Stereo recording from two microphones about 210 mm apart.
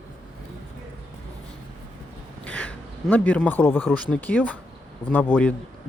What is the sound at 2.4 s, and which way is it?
A man's voice, 5° left (ahead or behind).